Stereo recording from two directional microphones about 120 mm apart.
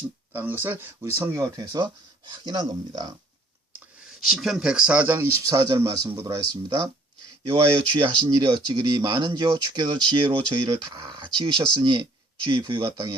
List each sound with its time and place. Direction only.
0.3 s speech: 15° right (ahead or behind)
1.5 s speech: 30° right (ahead or behind)
4.2 s speech: centre (ahead or behind); by 6.9 s 30° right (ahead or behind)
7.8 s speech: 40° right (ahead or behind)